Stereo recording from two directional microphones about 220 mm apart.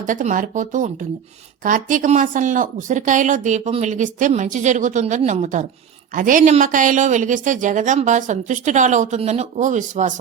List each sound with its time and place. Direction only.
0.0 s speech: 35° right (ahead or behind)